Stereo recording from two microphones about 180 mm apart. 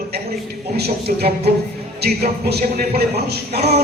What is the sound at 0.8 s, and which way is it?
Speech, 60° right (ahead or behind).